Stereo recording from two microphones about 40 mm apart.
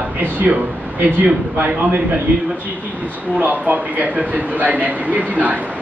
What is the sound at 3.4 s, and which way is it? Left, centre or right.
A man's voice, right.